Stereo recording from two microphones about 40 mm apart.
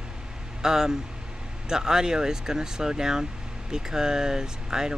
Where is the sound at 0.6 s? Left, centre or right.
Centre.